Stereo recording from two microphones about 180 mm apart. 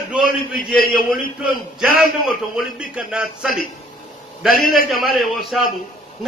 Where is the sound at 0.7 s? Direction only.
50° left (ahead or behind).